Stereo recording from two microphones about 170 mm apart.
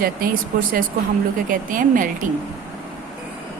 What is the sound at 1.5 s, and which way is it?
Speech, 55° right (ahead or behind).